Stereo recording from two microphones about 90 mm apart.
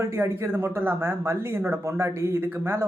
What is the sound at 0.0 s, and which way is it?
Speech, 30° right (ahead or behind).